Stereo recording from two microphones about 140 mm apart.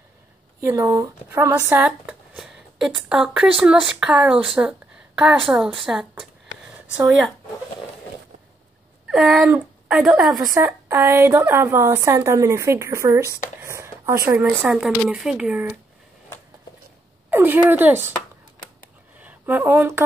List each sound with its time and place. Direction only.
0.6 s a woman's voice: 20° right (ahead or behind)
1.8 s speech: 5° right (ahead or behind)
9.1 s a woman's voice: 5° right (ahead or behind)
10.4 s a woman's voice: 20° right (ahead or behind)
14.4 s speech: 5° right (ahead or behind)
17.3 s speech: 15° right (ahead or behind)
19.1 s a sound: 10° right (ahead or behind)